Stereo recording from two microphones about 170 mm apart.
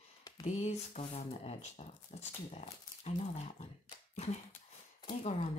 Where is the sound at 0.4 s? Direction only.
40° left (ahead or behind).